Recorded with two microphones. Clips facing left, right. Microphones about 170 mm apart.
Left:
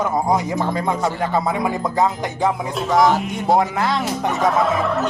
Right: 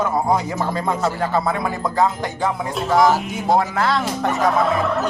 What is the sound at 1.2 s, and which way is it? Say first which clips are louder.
A man's voice: even; 15° left (ahead or behind).